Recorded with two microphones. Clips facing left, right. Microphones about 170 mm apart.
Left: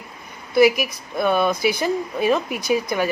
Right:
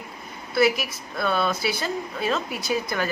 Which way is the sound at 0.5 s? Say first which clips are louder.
Left 5 dB; 15° left (ahead or behind).